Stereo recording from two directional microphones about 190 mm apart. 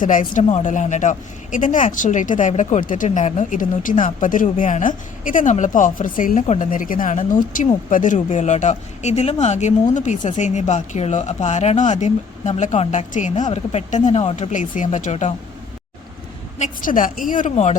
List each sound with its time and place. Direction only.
0.0 s speech: 45° left (ahead or behind)
16.6 s speech: 40° left (ahead or behind)